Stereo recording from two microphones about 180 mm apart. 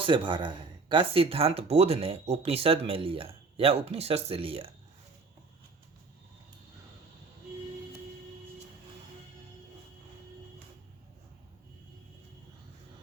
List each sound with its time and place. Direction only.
0.0 s speech: 25° right (ahead or behind)